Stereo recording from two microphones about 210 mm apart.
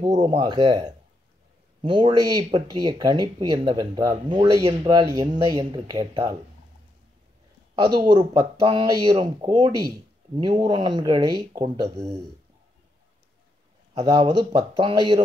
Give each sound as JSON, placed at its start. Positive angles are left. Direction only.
{"t": 0.0, "sound": "speech", "side_deg": -20}
{"t": 7.8, "sound": "speech", "side_deg": -20}
{"t": 14.0, "sound": "speech", "side_deg": -20}